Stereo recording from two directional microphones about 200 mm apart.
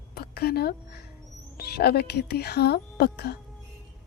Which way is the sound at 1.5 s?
50° left (ahead or behind).